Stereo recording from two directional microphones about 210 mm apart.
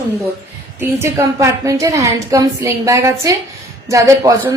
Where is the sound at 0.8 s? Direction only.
10° right (ahead or behind).